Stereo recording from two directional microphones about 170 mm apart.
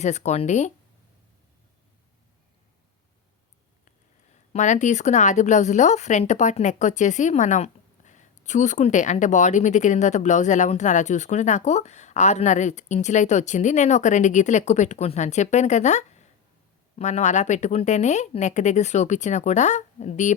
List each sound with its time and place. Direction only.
0.0 s a woman's voice: 40° left (ahead or behind)
4.5 s a woman's voice: 45° left (ahead or behind)